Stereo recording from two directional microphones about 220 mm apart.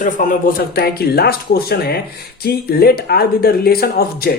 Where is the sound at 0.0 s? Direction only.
40° left (ahead or behind).